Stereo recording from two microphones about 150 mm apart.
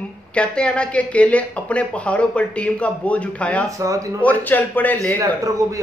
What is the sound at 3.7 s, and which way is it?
Speech, 20° right (ahead or behind).